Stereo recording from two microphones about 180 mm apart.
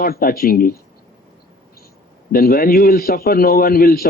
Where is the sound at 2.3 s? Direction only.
55° left (ahead or behind).